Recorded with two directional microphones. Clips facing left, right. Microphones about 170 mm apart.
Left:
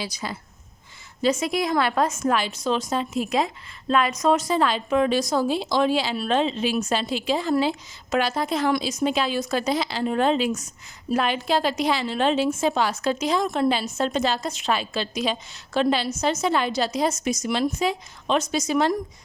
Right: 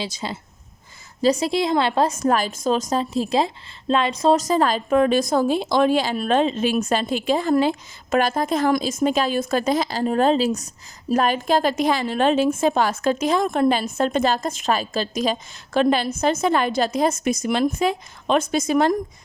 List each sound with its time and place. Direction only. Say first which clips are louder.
0.0 s speech: right 3 dB; 25° right (ahead or behind)
1.2 s a woman's voice: right 3 dB; 35° right (ahead or behind); by 18.9 s 50° right (ahead or behind)